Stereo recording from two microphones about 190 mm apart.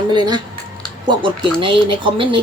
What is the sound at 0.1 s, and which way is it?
Speech, 25° right (ahead or behind).